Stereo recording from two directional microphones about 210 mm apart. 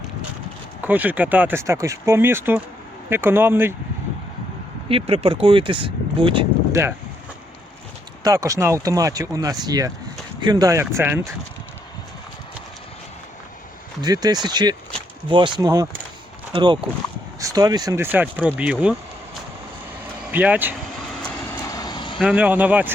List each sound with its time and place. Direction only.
0.8 s speech: 10° right (ahead or behind)
4.9 s speech: 25° right (ahead or behind)
6.8 s speech: 10° right (ahead or behind)
8.2 s speech: 15° right (ahead or behind)
14.0 s speech: 20° right (ahead or behind)
20.3 s speech: 10° right (ahead or behind)
21.2 s vehicle: 10° left (ahead or behind)
22.2 s speech: 5° right (ahead or behind)